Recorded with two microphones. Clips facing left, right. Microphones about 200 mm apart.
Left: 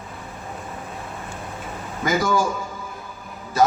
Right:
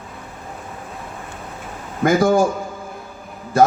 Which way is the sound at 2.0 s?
55° right (ahead or behind).